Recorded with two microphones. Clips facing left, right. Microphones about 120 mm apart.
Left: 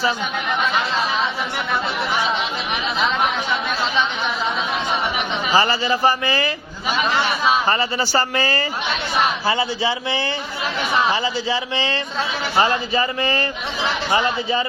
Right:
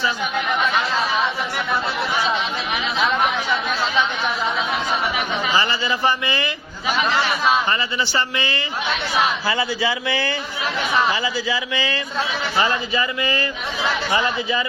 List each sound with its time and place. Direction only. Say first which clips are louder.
5.5 s speech: left 5 dB; 35° left (ahead or behind)
7.7 s speech: left 3 dB; 35° left (ahead or behind)
9.5 s a man's voice: left 1 dB; 25° left (ahead or behind)